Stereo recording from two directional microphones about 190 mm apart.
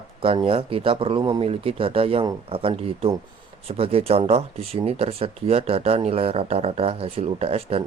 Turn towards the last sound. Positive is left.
turn(degrees=-30)  # may be behind; listen again after turning